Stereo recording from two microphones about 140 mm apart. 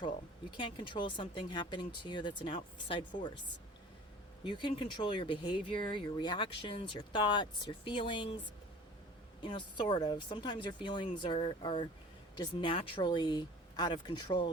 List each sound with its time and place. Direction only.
0.5 s speech: 35° left (ahead or behind)
4.4 s speech: 35° left (ahead or behind)
9.4 s speech: 35° left (ahead or behind)